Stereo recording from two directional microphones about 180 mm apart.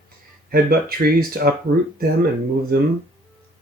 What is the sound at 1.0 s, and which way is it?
Speech, 55° right (ahead or behind).